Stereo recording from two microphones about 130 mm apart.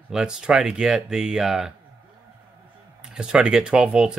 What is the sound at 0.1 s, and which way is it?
Speech, 5° right (ahead or behind).